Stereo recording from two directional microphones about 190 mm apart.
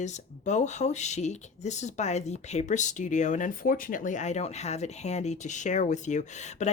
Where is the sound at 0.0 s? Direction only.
40° left (ahead or behind).